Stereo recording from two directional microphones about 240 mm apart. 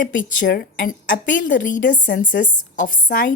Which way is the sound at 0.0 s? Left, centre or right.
Left.